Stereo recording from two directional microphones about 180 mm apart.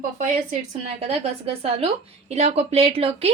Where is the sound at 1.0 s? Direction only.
35° right (ahead or behind).